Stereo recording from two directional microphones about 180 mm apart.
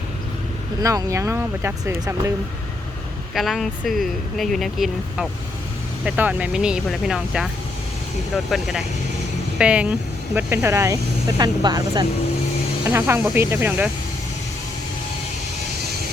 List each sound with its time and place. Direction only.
0.8 s speech: 20° right (ahead or behind)
3.3 s speech: centre (ahead or behind)